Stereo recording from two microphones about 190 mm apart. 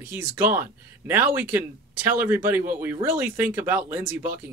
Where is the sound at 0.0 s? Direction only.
10° right (ahead or behind).